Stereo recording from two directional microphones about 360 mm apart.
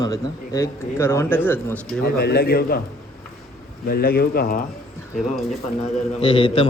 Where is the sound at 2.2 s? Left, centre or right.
Left.